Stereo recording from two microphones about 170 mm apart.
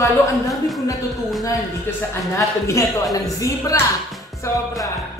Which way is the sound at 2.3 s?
15° left (ahead or behind).